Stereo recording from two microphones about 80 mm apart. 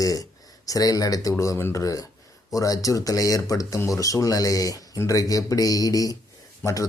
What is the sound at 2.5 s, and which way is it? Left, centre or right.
Speech, left.